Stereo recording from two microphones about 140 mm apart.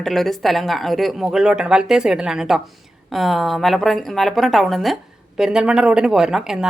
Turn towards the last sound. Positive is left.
turn(degrees=-5)  # may be behind; listen again after turning